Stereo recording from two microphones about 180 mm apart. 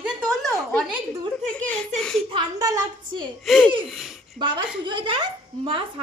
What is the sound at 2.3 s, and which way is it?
A woman's voice, 20° right (ahead or behind).